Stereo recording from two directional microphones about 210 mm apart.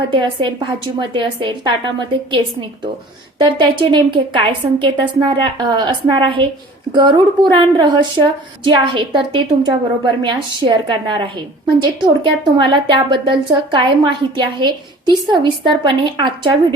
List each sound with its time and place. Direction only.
0.1 s a woman's voice: 25° right (ahead or behind)